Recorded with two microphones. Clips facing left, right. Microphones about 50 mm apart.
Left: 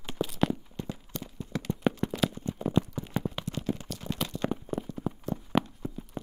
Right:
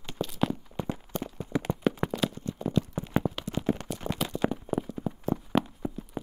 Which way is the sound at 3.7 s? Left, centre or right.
Right.